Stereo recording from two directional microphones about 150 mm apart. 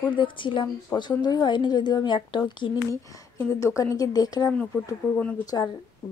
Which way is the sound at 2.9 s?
20° left (ahead or behind).